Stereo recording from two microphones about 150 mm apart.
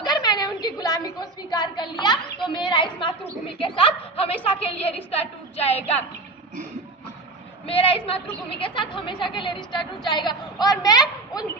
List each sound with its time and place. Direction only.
0.0 s a sound: 30° left (ahead or behind)
3.6 s a woman's voice: 35° left (ahead or behind)
7.7 s a woman's voice: 40° left (ahead or behind)